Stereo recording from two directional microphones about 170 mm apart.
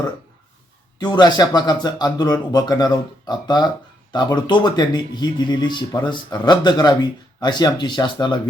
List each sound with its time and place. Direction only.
0.9 s speech: 25° left (ahead or behind)